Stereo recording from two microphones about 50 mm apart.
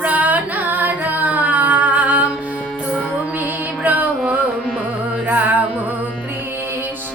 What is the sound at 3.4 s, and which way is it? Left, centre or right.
Music, right.